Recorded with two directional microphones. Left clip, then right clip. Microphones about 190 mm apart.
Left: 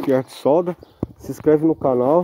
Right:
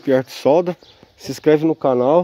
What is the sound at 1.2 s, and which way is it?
Speech, 35° right (ahead or behind).